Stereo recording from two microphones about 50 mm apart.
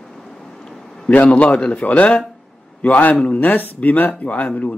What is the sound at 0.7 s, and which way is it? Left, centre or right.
A man's voice, left.